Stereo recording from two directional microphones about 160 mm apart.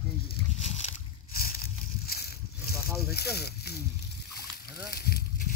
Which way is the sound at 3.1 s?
85° left.